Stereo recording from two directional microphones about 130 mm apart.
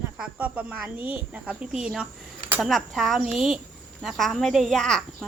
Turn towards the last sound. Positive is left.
turn(degrees=5)  # may be behind; listen again after turning